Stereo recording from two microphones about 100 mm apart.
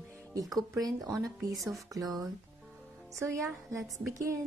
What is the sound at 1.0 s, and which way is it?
Speech, centre (ahead or behind).